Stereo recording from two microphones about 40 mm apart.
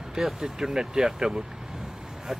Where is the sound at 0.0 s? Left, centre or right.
Centre.